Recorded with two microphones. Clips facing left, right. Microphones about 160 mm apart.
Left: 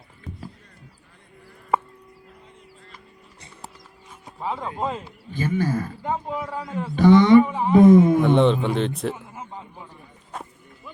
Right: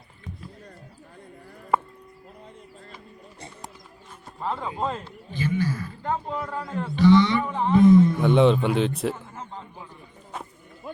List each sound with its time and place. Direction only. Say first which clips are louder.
0.3 s a sound: left 2 dB; centre (ahead or behind)
4.4 s speech: left 1 dB; 10° left (ahead or behind)
5.3 s speech: left 3 dB; 50° left (ahead or behind)
6.0 s speech: left 1 dB; 5° left (ahead or behind)
6.9 s speech: left 5 dB; 50° left (ahead or behind)
7.4 s speech: left 2 dB; 5° left (ahead or behind)
7.8 s speech: left 3 dB; 50° left (ahead or behind)
8.4 s speech: even; centre (ahead or behind)